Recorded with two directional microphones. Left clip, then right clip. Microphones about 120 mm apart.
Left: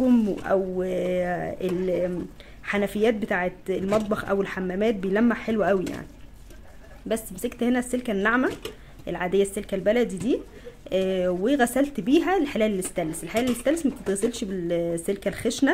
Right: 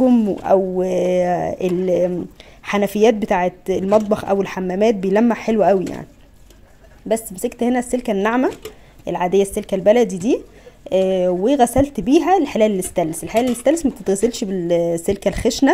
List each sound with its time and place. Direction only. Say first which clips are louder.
0.0 s speech: right 7 dB; 35° right (ahead or behind)
7.1 s speech: right 8 dB; 35° right (ahead or behind)
10.9 s speech: right 8 dB; 35° right (ahead or behind)